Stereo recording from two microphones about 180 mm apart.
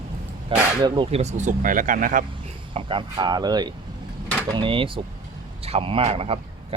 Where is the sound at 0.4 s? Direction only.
25° right (ahead or behind).